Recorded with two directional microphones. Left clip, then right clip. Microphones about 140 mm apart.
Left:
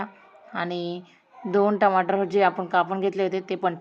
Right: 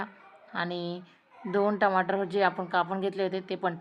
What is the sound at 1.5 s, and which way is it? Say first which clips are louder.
A woman's voice: left 5 dB; 5° left (ahead or behind).